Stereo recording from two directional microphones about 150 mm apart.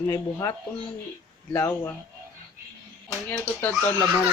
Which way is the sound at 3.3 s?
15° left (ahead or behind).